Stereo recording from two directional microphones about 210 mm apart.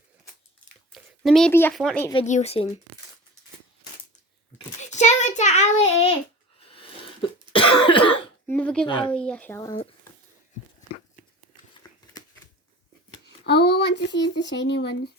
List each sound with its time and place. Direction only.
0.9 s speech: centre (ahead or behind)
2.2 s a child's voice: 30° left (ahead or behind)
4.8 s a child's voice: 35° left (ahead or behind)
6.6 s cough: 25° left (ahead or behind)
8.4 s speech: 5° left (ahead or behind)
11.7 s a sound: 20° left (ahead or behind)
13.2 s speech: 55° left (ahead or behind)